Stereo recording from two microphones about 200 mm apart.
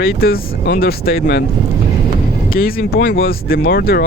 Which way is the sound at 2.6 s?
50° left (ahead or behind).